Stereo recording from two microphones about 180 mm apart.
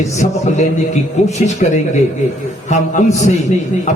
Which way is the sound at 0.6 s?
40° left (ahead or behind).